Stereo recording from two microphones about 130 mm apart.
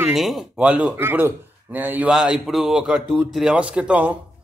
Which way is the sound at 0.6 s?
10° right (ahead or behind).